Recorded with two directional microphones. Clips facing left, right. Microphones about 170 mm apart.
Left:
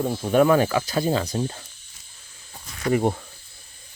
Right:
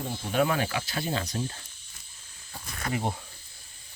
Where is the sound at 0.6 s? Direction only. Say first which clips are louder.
Left 9 dB; 40° left (ahead or behind).